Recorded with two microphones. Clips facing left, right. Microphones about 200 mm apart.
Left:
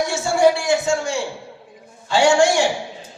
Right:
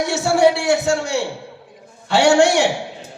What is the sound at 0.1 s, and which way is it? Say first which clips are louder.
A man's voice: right 3 dB; 65° right (ahead or behind).